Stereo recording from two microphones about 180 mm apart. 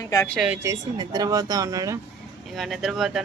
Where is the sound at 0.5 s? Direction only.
15° right (ahead or behind).